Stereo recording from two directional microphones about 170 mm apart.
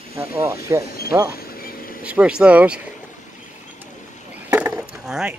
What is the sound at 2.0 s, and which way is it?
Speech, 5° right (ahead or behind).